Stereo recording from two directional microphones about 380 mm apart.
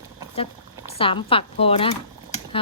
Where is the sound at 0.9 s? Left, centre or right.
Centre.